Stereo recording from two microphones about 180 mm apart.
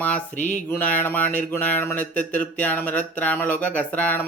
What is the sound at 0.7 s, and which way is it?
Speech, 10° left (ahead or behind).